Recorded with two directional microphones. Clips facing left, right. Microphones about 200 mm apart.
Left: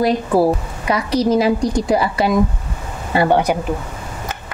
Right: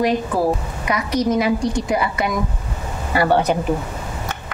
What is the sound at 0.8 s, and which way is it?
A woman's voice, 30° left (ahead or behind).